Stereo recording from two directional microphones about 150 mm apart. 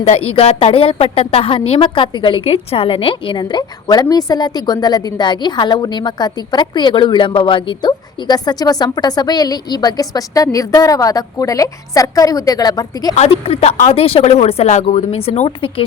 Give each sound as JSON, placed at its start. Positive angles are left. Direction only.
{"t": 0.0, "sound": "a woman's voice", "side_deg": 45}
{"t": 13.1, "sound": "speech", "side_deg": 45}